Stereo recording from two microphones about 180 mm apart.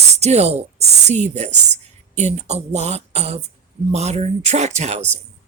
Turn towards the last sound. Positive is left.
turn(degrees=-40)  # may be behind; listen again after turning